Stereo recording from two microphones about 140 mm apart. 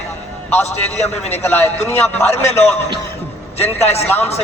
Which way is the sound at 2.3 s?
50° left (ahead or behind).